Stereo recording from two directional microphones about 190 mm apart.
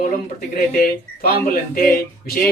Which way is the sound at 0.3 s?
50° left (ahead or behind).